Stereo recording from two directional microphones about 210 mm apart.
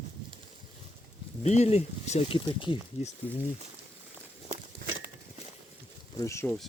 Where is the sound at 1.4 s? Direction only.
30° left (ahead or behind).